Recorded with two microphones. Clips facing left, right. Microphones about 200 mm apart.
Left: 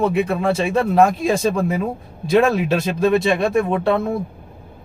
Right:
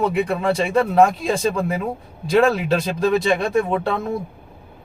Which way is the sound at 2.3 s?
Centre (ahead or behind).